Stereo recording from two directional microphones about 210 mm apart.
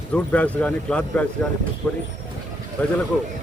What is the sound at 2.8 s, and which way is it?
Speech, 10° left (ahead or behind).